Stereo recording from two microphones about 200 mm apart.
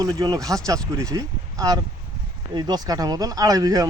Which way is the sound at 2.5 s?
20° right (ahead or behind).